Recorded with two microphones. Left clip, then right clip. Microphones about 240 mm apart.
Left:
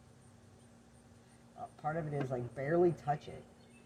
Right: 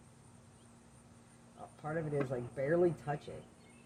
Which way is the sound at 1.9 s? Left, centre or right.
Left.